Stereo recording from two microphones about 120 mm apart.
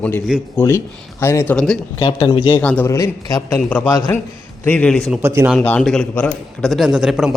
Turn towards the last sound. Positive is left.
turn(degrees=-5)  # may be behind; listen again after turning